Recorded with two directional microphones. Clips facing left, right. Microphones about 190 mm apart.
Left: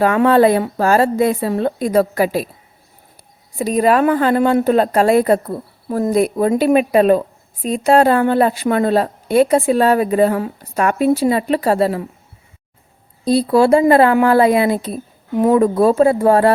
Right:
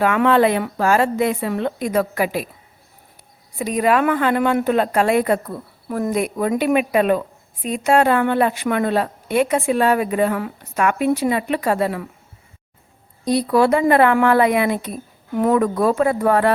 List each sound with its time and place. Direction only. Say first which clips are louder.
0.0 s a woman's voice: left 4 dB; 35° left (ahead or behind)
3.6 s a woman's voice: left 4 dB; 35° left (ahead or behind)
13.2 s speech: left 3 dB; 30° left (ahead or behind)